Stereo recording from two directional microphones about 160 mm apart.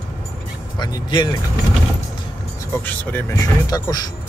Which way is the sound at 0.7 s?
25° left (ahead or behind).